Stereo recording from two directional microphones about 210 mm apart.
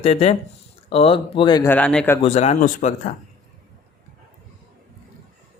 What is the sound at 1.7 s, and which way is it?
Speech, 5° left (ahead or behind).